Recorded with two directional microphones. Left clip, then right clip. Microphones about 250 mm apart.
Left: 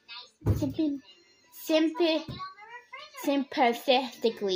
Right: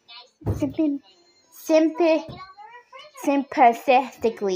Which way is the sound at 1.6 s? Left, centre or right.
Centre.